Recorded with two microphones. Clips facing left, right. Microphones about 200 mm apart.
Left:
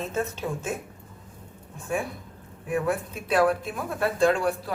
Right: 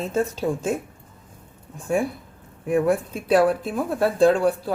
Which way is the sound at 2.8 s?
30° right (ahead or behind).